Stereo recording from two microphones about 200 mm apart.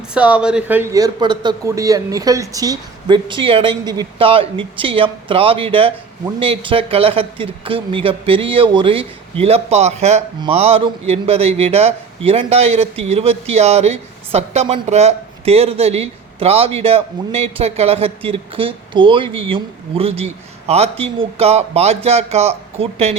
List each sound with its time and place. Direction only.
0.1 s a man's voice: 5° right (ahead or behind); by 23.1 s 30° right (ahead or behind)